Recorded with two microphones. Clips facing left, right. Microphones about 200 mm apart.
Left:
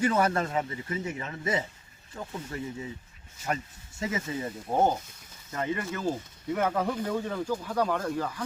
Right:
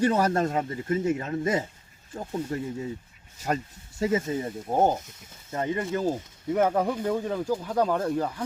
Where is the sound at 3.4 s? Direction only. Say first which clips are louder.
Right 4 dB; 35° right (ahead or behind).